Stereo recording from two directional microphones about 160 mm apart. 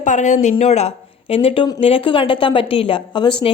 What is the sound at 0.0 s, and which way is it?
Speech, 50° left (ahead or behind).